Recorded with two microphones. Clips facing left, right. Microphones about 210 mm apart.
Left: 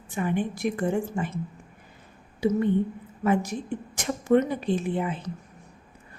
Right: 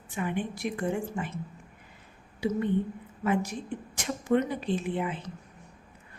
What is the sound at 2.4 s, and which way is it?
Speech, 45° left (ahead or behind).